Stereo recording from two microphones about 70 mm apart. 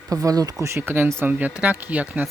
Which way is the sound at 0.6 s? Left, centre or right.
Right.